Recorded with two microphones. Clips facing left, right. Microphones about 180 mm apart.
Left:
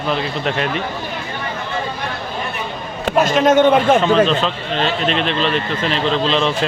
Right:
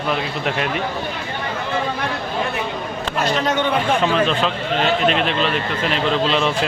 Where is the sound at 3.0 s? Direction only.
45° left (ahead or behind).